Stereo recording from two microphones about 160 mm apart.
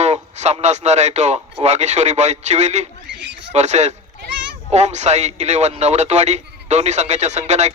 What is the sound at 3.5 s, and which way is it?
A man's voice, 45° right (ahead or behind).